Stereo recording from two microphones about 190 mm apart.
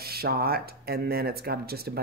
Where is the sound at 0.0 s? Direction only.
55° right (ahead or behind).